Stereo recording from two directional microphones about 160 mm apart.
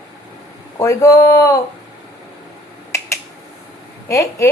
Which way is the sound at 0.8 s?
20° left (ahead or behind).